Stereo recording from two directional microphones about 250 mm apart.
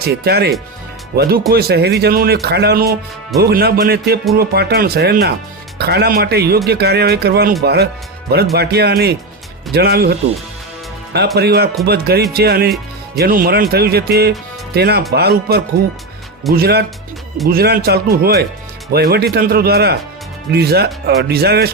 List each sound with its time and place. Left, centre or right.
0.0 s speech: right
11.3 s speech: right